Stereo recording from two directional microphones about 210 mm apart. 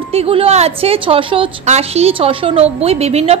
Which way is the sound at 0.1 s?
30° right (ahead or behind).